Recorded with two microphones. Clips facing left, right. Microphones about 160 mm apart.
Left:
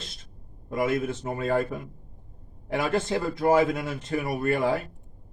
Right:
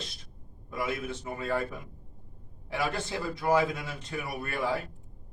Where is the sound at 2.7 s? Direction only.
50° left (ahead or behind).